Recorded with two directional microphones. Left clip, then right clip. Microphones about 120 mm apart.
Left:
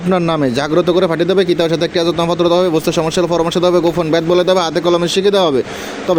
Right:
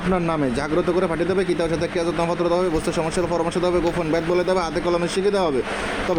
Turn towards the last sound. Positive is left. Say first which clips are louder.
# left 8 dB
turn(degrees=30)  # may be behind; listen again after turning